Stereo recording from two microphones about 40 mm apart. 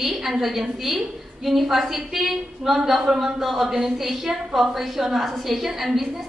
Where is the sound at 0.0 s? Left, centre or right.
Centre.